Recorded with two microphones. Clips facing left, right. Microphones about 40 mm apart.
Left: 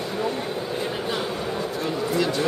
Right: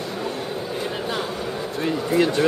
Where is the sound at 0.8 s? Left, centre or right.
Centre.